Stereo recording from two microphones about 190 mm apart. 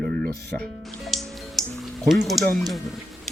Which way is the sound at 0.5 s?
5° left (ahead or behind).